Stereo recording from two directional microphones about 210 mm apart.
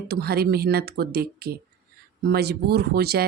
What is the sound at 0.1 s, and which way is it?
Speech, 50° right (ahead or behind).